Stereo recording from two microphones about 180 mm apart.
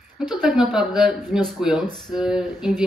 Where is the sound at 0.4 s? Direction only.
5° right (ahead or behind).